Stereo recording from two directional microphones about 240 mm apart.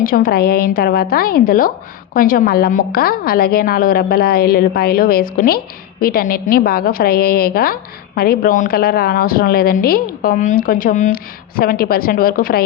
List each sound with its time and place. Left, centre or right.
0.0 s a woman's voice: left